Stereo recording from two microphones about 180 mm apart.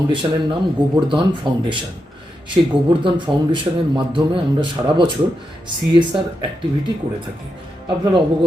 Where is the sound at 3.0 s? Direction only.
25° right (ahead or behind).